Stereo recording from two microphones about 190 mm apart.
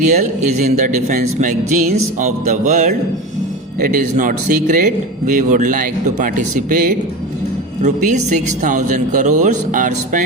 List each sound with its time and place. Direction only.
0.1 s a man's voice: 40° right (ahead or behind)